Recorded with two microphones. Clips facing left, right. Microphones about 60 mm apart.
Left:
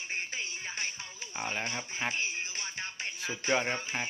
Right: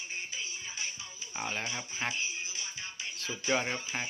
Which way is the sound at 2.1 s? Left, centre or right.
Left.